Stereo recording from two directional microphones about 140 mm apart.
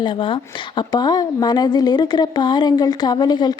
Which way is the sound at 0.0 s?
35° left (ahead or behind).